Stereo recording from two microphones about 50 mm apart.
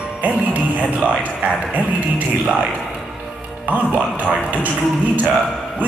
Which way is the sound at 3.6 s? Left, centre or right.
Right.